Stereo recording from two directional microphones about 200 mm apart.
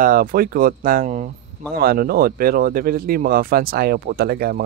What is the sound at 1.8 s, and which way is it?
Speech, 50° right (ahead or behind).